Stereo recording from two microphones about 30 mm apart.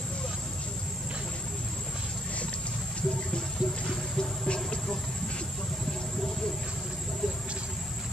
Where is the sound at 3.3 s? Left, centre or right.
Left.